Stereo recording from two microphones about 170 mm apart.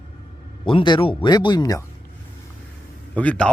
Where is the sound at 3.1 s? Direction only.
5° left (ahead or behind).